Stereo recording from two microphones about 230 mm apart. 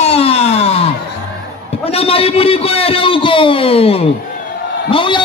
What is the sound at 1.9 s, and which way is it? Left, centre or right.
A man's voice, left.